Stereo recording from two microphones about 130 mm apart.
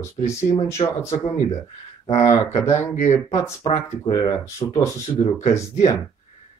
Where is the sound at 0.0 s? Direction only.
20° left (ahead or behind).